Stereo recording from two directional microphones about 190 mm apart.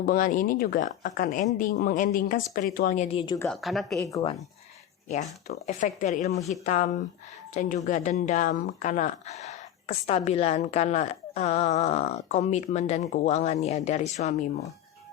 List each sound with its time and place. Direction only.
0.0 s speech: 50° left (ahead or behind); by 3.3 s 30° left (ahead or behind)
3.5 s speech: centre (ahead or behind)
3.9 s speech: 15° left (ahead or behind)
5.6 s speech: 40° left (ahead or behind)